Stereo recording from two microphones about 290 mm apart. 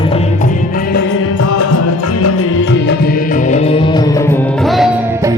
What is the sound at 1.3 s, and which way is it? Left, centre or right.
Music, left.